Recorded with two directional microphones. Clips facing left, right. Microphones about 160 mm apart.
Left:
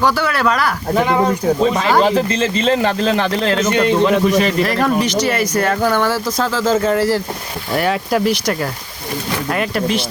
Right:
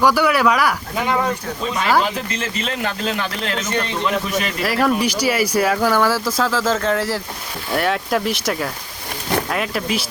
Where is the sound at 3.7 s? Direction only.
50° left (ahead or behind).